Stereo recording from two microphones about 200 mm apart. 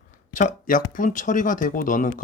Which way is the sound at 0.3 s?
40° left (ahead or behind).